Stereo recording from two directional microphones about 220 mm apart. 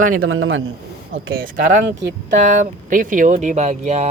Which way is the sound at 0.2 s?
65° right (ahead or behind).